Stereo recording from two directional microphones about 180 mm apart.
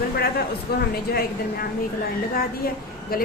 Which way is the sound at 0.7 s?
60° left (ahead or behind).